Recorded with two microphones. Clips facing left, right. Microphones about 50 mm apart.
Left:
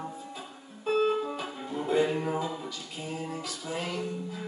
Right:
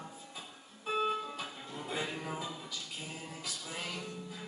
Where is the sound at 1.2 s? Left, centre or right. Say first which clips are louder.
Left 7 dB; centre.